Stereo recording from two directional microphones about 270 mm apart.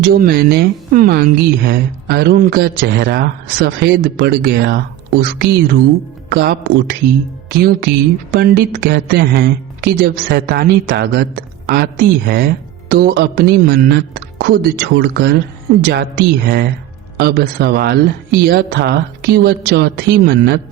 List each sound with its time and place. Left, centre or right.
0.0 s speech: right